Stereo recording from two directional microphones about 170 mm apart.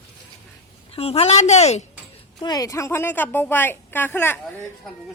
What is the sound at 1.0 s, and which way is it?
Speech, 35° left (ahead or behind).